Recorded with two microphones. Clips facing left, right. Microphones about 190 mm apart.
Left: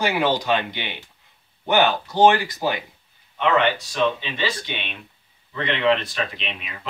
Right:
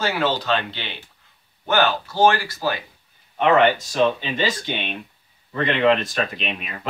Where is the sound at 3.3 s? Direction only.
45° right (ahead or behind).